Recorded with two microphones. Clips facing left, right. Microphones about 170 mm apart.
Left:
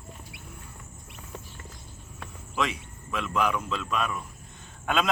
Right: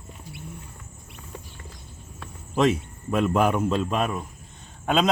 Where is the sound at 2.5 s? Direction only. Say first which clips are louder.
Right 9 dB; 45° right (ahead or behind).